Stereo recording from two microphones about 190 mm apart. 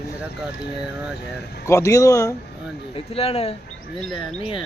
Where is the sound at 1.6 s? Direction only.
15° left (ahead or behind).